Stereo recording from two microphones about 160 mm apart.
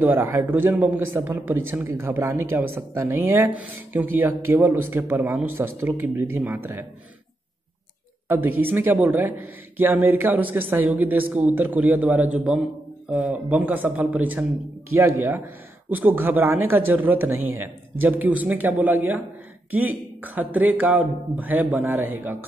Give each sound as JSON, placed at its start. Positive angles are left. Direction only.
{"t": 0.0, "sound": "speech", "side_deg": -15}
{"t": 8.3, "sound": "speech", "side_deg": -10}